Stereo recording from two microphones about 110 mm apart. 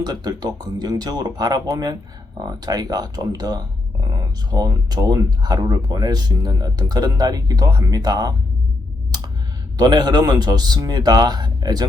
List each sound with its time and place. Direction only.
0.0 s speech: 40° right (ahead or behind)
9.7 s speech: 40° right (ahead or behind)